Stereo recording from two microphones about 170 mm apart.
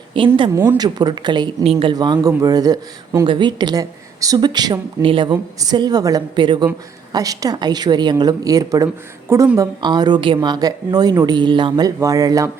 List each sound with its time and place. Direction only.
0.1 s speech: 30° right (ahead or behind)
0.5 s speech: 10° right (ahead or behind)
0.8 s speech: 25° right (ahead or behind)